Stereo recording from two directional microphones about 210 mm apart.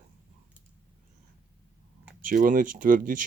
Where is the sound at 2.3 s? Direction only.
40° right (ahead or behind).